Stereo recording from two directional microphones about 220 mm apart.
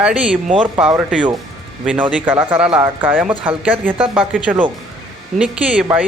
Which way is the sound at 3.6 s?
5° right (ahead or behind).